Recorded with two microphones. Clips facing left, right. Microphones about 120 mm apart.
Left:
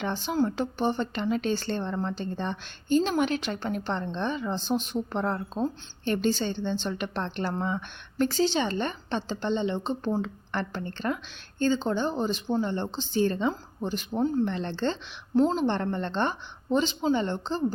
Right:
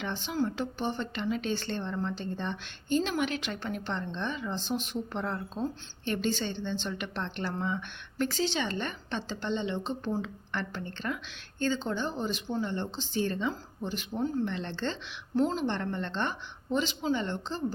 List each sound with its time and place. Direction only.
0.0 s speech: 40° left (ahead or behind)